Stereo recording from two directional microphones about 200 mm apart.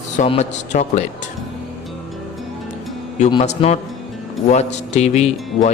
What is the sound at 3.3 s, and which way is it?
Speech, 30° left (ahead or behind).